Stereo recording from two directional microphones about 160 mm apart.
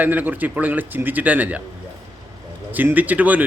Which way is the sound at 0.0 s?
10° right (ahead or behind).